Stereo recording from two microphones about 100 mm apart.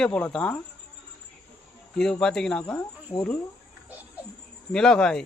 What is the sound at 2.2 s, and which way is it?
Speech, 5° left (ahead or behind).